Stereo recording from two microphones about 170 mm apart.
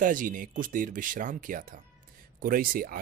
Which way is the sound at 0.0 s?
50° right (ahead or behind).